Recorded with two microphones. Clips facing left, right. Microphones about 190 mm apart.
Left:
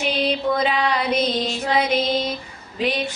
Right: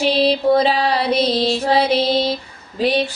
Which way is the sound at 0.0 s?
35° right (ahead or behind).